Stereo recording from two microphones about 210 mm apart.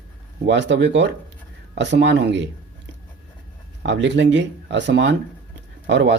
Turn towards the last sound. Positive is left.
turn(degrees=-55)  # may be behind; listen again after turning